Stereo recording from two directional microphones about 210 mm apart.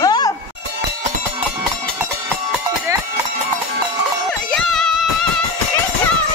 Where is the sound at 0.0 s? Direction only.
20° left (ahead or behind).